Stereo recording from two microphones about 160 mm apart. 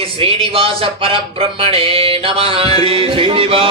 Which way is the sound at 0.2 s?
35° right (ahead or behind).